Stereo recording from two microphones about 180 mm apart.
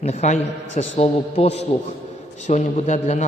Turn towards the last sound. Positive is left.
turn(degrees=40)  # may be behind; listen again after turning